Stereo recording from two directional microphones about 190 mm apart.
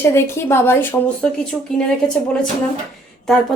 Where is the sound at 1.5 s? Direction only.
5° right (ahead or behind).